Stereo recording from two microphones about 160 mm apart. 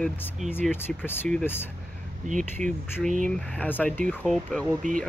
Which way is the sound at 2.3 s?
50° right (ahead or behind).